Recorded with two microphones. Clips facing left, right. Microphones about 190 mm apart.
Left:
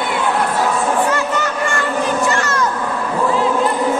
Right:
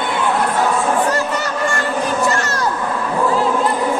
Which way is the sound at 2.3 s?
35° right (ahead or behind).